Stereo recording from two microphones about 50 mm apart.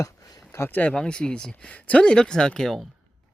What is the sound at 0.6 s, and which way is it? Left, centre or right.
Speech, left.